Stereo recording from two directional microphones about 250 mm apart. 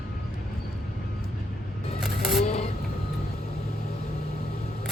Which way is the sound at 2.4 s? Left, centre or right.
Left.